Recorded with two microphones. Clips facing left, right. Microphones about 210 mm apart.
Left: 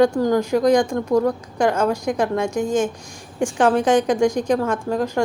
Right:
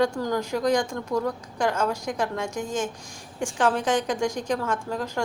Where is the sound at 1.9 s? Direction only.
15° left (ahead or behind).